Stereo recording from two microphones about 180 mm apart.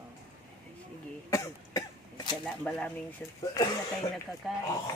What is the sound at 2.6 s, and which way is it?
Speech, 5° left (ahead or behind).